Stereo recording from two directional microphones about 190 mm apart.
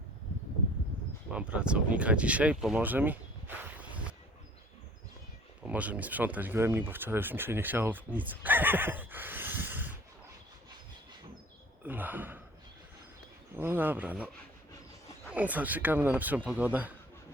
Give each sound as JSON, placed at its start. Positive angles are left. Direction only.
{"t": 1.3, "sound": "speech", "side_deg": -5}
{"t": 5.6, "sound": "speech", "side_deg": -5}
{"t": 11.9, "sound": "speech", "side_deg": -10}
{"t": 13.6, "sound": "speech", "side_deg": -10}
{"t": 15.3, "sound": "speech", "side_deg": -10}